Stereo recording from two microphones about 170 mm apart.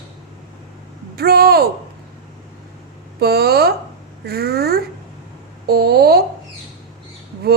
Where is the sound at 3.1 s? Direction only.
65° right (ahead or behind).